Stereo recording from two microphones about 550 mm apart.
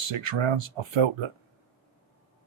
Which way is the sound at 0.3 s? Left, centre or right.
Right.